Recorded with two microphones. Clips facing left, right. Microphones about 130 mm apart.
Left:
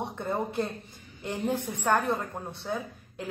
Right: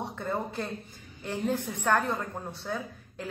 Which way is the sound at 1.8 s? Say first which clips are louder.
Left 1 dB; 15° left (ahead or behind).